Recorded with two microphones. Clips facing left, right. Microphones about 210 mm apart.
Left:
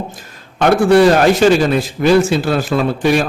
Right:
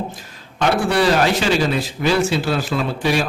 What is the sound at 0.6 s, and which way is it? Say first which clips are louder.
A man's voice: left 8 dB; 45° left (ahead or behind).